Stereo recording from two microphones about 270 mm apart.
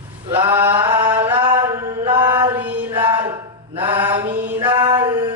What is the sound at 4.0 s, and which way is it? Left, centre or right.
Mantra, centre.